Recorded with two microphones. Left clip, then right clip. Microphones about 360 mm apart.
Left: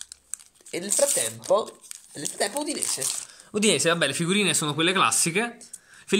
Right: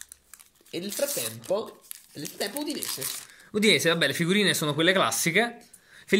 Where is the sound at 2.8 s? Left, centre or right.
Centre.